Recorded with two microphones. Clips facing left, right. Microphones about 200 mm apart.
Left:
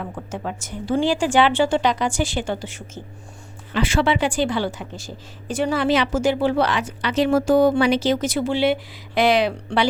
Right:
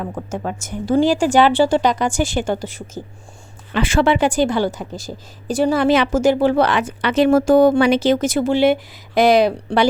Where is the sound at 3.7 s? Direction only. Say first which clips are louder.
Right 4 dB; 50° right (ahead or behind).